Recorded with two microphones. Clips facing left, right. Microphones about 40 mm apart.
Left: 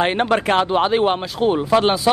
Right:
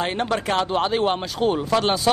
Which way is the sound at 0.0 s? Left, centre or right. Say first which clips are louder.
Left 6 dB; left.